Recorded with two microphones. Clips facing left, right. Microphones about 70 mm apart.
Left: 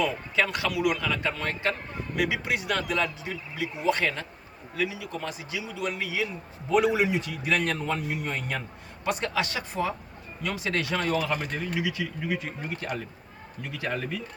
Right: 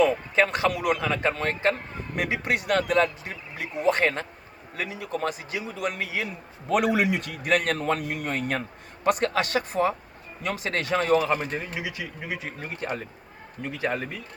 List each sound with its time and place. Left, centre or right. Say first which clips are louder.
0.0 s a man's voice: right 5 dB; right
11.5 s a man's voice: left 2 dB; right
13.6 s a man's voice: right 3 dB; right